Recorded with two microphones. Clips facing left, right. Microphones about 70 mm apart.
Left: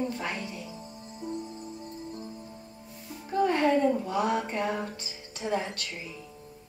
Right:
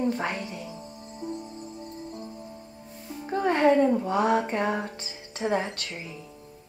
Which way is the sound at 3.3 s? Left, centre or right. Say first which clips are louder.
Right 3 dB; right.